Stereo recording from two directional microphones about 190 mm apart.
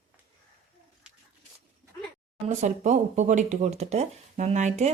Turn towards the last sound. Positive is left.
turn(degrees=-35)  # may be behind; listen again after turning